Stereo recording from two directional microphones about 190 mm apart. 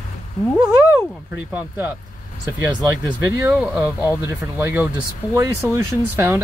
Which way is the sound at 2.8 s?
15° right (ahead or behind).